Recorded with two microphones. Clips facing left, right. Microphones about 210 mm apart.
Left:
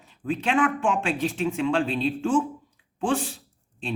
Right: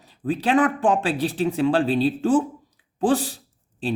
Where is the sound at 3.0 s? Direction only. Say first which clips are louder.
Right 5 dB; 35° right (ahead or behind).